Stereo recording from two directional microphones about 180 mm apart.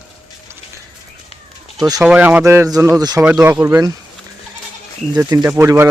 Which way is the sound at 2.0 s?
5° right (ahead or behind).